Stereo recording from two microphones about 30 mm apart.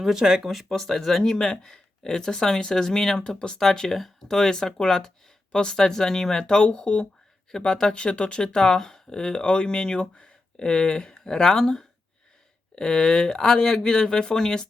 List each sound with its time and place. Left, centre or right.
0.2 s speech: right
0.7 s speech: centre; by 3.6 s left
3.6 s speech: centre
6.4 s speech: left
7.6 s speech: left
7.9 s speech: left